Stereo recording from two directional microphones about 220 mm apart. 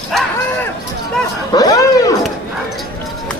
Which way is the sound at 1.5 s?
15° left (ahead or behind).